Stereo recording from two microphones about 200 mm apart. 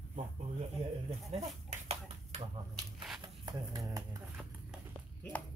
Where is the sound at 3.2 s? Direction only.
20° right (ahead or behind).